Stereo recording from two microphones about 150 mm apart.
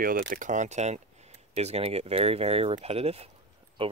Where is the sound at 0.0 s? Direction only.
70° right (ahead or behind).